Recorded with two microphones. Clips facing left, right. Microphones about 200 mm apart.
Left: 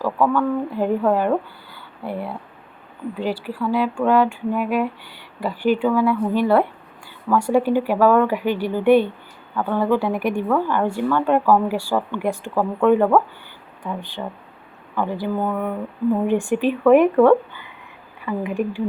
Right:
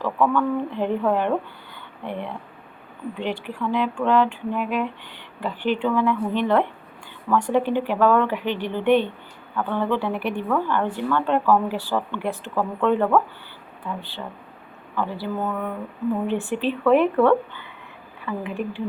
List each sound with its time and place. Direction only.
0.0 s speech: 5° left (ahead or behind)